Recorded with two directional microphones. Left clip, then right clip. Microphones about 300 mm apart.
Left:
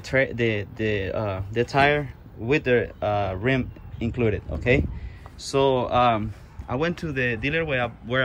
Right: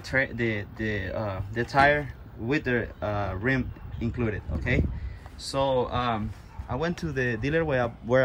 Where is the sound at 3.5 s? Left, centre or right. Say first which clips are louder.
Left 3 dB; centre.